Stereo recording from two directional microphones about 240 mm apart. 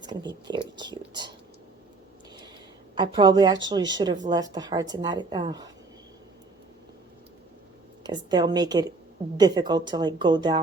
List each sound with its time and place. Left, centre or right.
0.0 s a sound: centre
2.9 s a woman's voice: centre
8.0 s a woman's voice: centre